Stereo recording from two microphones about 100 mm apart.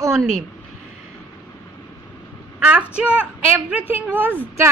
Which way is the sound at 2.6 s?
15° right (ahead or behind).